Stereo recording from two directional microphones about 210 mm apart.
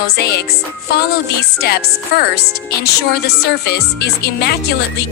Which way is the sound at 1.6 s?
50° left (ahead or behind).